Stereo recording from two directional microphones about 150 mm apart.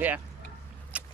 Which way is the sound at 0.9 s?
10° right (ahead or behind).